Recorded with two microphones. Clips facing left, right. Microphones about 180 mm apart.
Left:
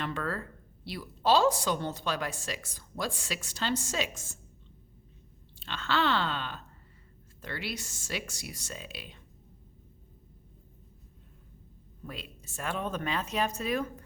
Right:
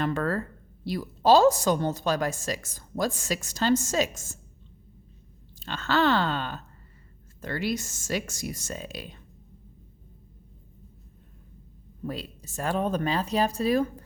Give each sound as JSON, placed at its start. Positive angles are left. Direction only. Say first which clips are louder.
{"t": 0.0, "sound": "a woman's voice", "louder": "right 7 dB", "side_deg": -45}
{"t": 5.5, "sound": "a woman's voice", "louder": "right 5 dB", "side_deg": -40}
{"t": 12.0, "sound": "speech", "louder": "right 9 dB", "side_deg": -40}